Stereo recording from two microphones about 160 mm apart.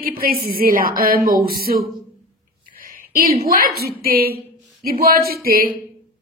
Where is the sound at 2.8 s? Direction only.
65° right (ahead or behind).